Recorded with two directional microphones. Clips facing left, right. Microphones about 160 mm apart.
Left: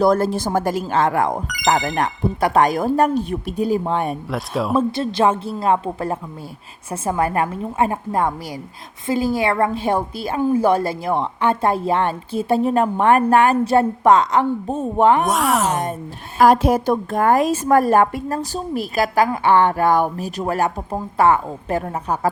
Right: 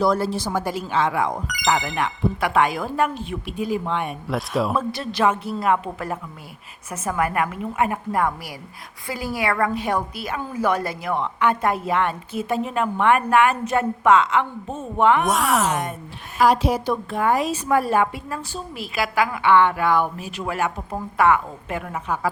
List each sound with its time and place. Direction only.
0.0 s a woman's voice: 50° left (ahead or behind)
4.3 s speech: centre (ahead or behind)
4.7 s a woman's voice: 25° left (ahead or behind)
15.2 s speech: centre (ahead or behind)
16.4 s a woman's voice: 50° left (ahead or behind)